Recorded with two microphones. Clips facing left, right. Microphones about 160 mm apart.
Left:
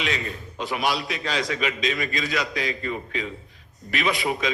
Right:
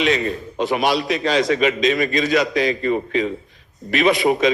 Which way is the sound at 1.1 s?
70° right (ahead or behind).